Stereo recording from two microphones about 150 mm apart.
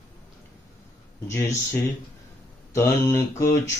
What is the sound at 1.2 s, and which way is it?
Mantra, 20° left (ahead or behind).